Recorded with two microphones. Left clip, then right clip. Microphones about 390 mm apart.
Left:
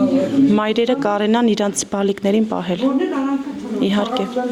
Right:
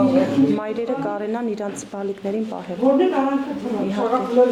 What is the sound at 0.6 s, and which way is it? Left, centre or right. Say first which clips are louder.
Speech: left 7 dB; left.